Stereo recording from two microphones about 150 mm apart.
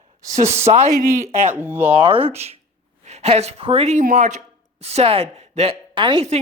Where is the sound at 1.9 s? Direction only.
35° right (ahead or behind).